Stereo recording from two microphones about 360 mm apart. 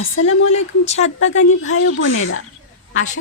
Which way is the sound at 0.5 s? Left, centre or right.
Centre.